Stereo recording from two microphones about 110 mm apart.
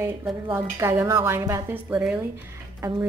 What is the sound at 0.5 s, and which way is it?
Speech, 20° right (ahead or behind).